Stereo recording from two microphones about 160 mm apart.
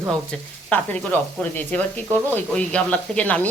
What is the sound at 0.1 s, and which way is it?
Speech, 10° left (ahead or behind).